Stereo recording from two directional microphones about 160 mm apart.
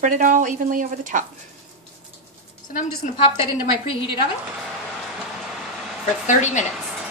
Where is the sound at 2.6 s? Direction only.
55° left (ahead or behind).